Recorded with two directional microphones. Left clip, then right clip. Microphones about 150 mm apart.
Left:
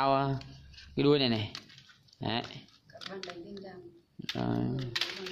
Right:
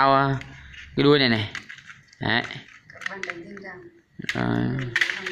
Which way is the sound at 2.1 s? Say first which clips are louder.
Right 11 dB; centre (ahead or behind).